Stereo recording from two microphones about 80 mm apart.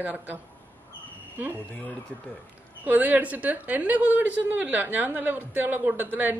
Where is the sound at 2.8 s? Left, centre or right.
Right.